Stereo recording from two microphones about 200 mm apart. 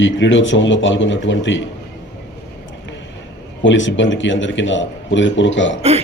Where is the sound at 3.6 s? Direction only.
65° left (ahead or behind).